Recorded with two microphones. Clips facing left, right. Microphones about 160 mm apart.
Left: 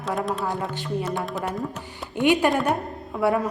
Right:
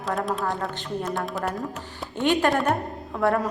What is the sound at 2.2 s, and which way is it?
Speech, 15° left (ahead or behind).